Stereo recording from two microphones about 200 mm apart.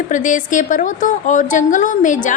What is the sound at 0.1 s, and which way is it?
A woman's voice, 40° left (ahead or behind).